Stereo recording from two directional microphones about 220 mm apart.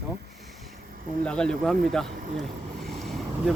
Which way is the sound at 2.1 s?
50° right (ahead or behind).